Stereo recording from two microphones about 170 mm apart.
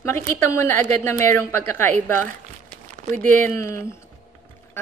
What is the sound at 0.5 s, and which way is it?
Speech, 15° left (ahead or behind).